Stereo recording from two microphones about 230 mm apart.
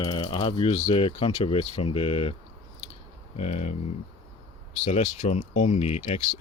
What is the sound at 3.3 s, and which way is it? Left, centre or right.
Speech, left.